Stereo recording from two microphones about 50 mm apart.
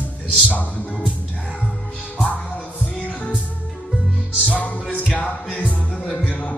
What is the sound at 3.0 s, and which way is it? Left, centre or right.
Music, left.